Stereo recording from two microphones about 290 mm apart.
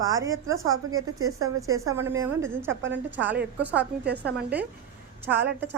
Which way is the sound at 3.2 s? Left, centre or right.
Centre.